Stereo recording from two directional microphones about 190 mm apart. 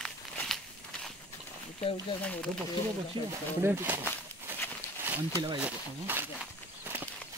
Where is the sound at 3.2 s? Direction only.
25° right (ahead or behind).